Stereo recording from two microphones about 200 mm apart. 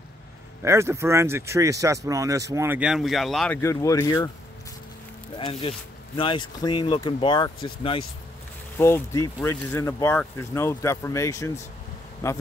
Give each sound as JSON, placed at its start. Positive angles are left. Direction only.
{"t": 0.6, "sound": "speech", "side_deg": -15}
{"t": 3.6, "sound": "speech", "side_deg": 15}
{"t": 5.4, "sound": "speech", "side_deg": 30}
{"t": 8.7, "sound": "speech", "side_deg": 10}